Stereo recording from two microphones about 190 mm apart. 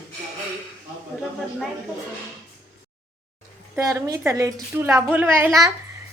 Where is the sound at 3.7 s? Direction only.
15° right (ahead or behind).